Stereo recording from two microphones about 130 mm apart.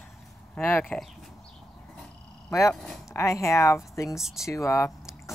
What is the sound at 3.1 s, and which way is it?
Speech, 20° left (ahead or behind).